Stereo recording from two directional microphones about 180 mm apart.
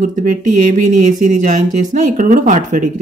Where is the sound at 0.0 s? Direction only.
45° right (ahead or behind).